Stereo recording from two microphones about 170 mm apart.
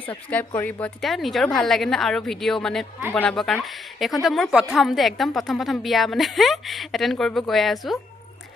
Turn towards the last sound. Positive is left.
turn(degrees=0)  # may be behind; listen again after turning